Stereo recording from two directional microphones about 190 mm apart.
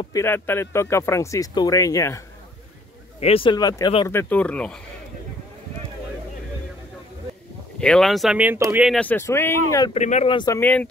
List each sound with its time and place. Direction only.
0.0 s speech: 15° left (ahead or behind)
3.2 s speech: 30° left (ahead or behind); by 4.8 s 5° left (ahead or behind)
7.8 s speech: 5° left (ahead or behind); by 8.8 s 15° right (ahead or behind)
8.8 s speech: 5° left (ahead or behind)
9.9 s speech: 35° left (ahead or behind)
10.6 s speech: 10° left (ahead or behind)